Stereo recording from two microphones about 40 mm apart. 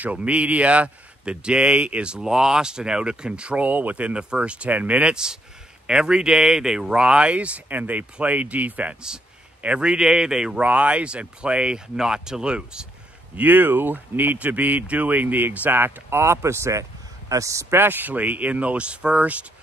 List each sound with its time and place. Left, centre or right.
0.0 s speech: right
2.1 s speech: centre
4.6 s speech: right
5.1 s speech: centre; by 8.9 s right
9.6 s speech: right
10.6 s speech: right
13.4 s speech: right
14.4 s speech: right
15.8 s speech: right
17.7 s speech: right